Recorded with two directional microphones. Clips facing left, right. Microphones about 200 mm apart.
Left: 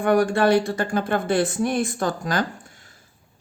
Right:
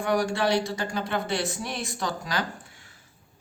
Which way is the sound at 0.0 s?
55° left (ahead or behind).